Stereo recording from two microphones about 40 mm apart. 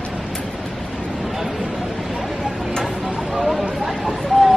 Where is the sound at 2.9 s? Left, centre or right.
Centre.